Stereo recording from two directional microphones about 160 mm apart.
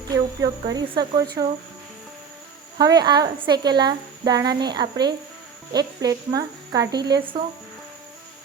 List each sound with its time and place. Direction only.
0.1 s a woman's voice: 25° right (ahead or behind)
2.7 s a woman's voice: 25° right (ahead or behind)